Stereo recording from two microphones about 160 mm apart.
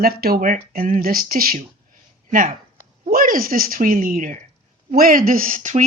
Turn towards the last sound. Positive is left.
turn(degrees=-50)  # may be behind; listen again after turning